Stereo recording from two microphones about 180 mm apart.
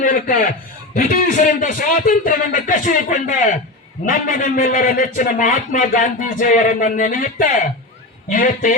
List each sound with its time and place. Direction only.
0.0 s a man's voice: 50° left (ahead or behind)